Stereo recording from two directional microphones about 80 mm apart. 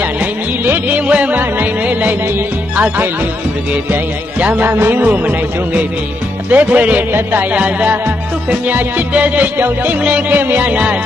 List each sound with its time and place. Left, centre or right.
0.2 s music: centre
2.7 s speech: right
3.9 s music: centre